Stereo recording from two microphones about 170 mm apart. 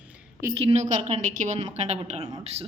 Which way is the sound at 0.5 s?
35° right (ahead or behind).